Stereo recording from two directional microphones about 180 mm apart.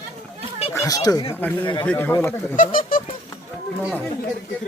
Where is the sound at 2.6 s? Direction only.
50° left (ahead or behind).